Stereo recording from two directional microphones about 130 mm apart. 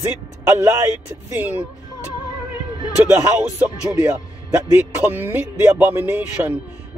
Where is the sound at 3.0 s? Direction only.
5° right (ahead or behind).